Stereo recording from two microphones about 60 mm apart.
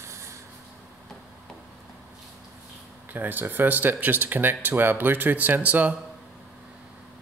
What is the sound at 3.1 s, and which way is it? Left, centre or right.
Speech, right.